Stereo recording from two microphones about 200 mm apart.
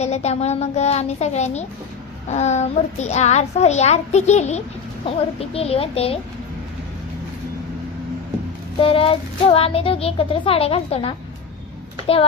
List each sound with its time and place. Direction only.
0.0 s a child's voice: 35° left (ahead or behind)
8.8 s a child's voice: 25° left (ahead or behind)